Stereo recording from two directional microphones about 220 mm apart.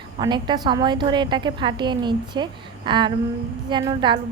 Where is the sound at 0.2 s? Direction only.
20° right (ahead or behind).